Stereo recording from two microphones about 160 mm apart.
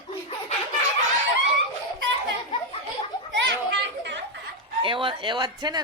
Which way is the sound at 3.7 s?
90° right.